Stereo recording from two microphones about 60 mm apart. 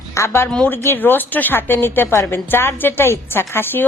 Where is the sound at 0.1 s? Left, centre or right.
Left.